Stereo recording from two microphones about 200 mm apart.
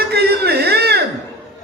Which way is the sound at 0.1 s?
55° right (ahead or behind).